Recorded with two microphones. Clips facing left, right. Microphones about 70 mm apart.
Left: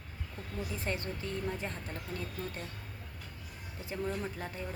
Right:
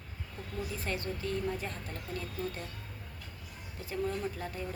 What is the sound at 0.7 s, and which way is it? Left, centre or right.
Speech, left.